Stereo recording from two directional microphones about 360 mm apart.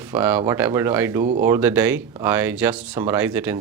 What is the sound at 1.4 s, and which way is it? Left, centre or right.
Speech, centre.